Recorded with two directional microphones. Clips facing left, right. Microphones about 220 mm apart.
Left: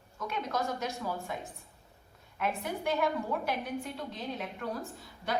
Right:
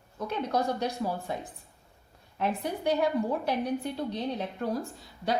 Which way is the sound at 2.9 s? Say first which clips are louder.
Right 4 dB; 35° right (ahead or behind).